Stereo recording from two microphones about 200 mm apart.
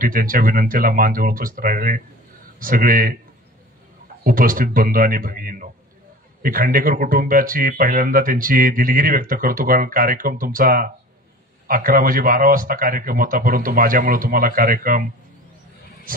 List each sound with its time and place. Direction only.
0.0 s speech: 45° right (ahead or behind)
4.2 s speech: 45° right (ahead or behind)